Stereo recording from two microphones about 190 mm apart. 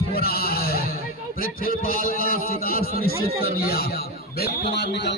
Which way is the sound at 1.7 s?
50° left (ahead or behind).